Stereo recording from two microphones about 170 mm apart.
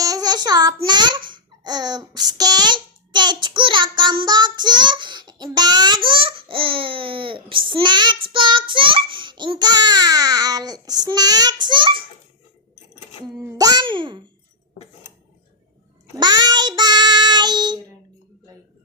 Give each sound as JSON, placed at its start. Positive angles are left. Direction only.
{"t": 0.0, "sound": "child singing", "side_deg": -20}
{"t": 0.9, "sound": "a child's voice", "side_deg": -25}
{"t": 13.4, "sound": "a child's voice", "side_deg": -20}
{"t": 16.1, "sound": "child singing", "side_deg": -25}